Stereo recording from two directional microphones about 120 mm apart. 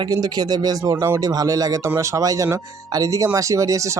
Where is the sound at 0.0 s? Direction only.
35° right (ahead or behind).